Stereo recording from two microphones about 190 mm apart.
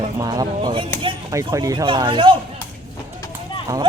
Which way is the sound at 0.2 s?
20° right (ahead or behind).